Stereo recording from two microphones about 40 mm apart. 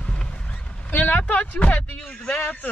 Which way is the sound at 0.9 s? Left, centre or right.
Left.